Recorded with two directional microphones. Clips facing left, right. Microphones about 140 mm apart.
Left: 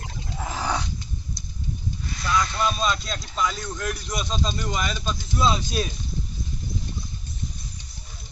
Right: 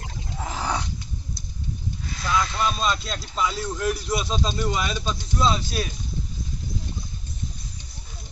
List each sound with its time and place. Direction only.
0.4 s wild animals: 5° left (ahead or behind)
2.2 s a man's voice: centre (ahead or behind)
5.4 s speech: 15° left (ahead or behind)